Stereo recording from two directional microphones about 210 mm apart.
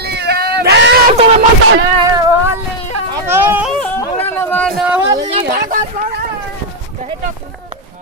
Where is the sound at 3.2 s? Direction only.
10° right (ahead or behind).